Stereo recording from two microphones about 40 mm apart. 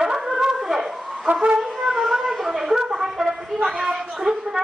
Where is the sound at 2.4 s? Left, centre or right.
Centre.